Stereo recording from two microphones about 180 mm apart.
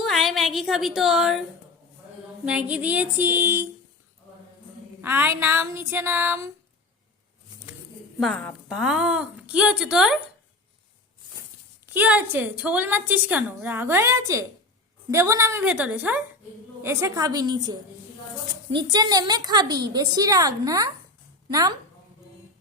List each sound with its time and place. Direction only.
0.0 s a sound: centre (ahead or behind)
2.4 s a woman's voice: 10° right (ahead or behind)
4.9 s a woman's voice: 10° right (ahead or behind)
8.7 s speech: 5° right (ahead or behind)
11.9 s a woman's voice: 10° right (ahead or behind)